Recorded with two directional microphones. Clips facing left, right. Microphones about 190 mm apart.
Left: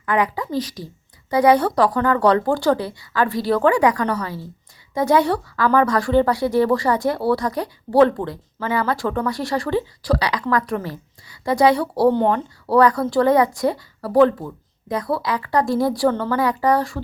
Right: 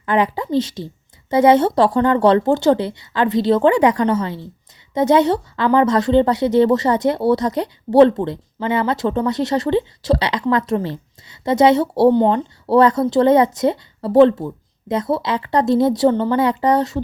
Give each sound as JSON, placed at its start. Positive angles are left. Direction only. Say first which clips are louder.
{"t": 0.0, "sound": "speech", "louder": "right 3 dB", "side_deg": -25}